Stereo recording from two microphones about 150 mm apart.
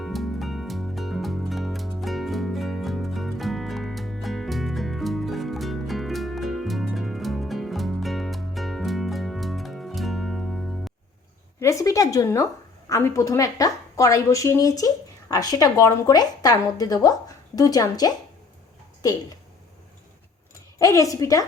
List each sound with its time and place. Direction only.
0.0 s music: centre (ahead or behind)
11.6 s a woman's voice: 20° left (ahead or behind)
20.7 s a woman's voice: 20° left (ahead or behind)